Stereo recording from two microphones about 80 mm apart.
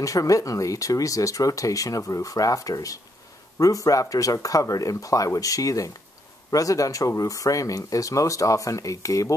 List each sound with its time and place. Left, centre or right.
0.0 s speech: left